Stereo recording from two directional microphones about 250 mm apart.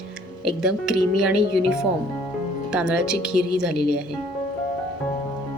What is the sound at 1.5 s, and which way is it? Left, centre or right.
Speech, left.